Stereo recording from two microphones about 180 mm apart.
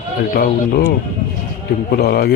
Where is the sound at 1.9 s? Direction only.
60° left (ahead or behind).